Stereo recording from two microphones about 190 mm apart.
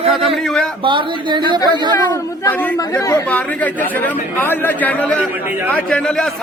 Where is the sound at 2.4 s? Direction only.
10° left (ahead or behind).